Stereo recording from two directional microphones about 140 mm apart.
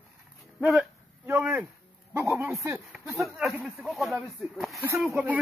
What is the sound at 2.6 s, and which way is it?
Speech, 5° right (ahead or behind).